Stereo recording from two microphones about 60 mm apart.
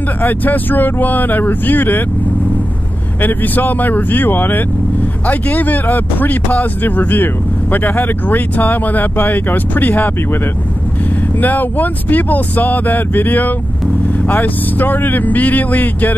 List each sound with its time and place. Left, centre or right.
0.2 s speech: left
3.2 s speech: left
11.3 s speech: left